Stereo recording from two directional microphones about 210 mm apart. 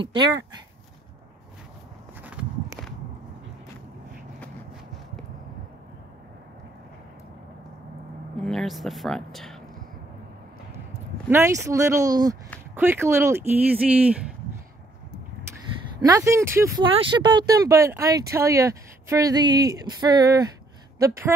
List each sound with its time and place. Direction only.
2.2 s walk: 5° right (ahead or behind)
8.4 s speech: centre (ahead or behind)
11.2 s speech: 15° right (ahead or behind)
16.0 s speech: 15° right (ahead or behind)